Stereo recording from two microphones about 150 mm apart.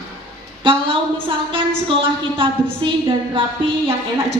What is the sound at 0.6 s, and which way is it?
Speech, 35° right (ahead or behind).